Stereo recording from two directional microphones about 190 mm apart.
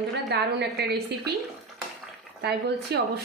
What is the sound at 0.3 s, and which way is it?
Speech, 60° right (ahead or behind).